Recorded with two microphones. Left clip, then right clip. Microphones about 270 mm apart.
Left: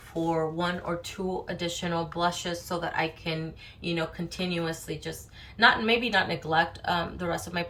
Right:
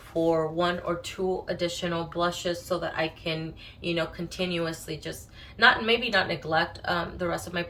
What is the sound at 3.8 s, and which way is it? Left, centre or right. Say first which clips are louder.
A woman's voice: right 2 dB; centre.